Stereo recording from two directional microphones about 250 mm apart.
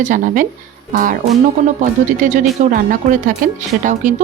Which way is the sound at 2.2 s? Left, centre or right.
Right.